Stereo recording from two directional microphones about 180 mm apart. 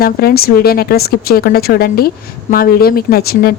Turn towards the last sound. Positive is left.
turn(degrees=60)  # may be behind; listen again after turning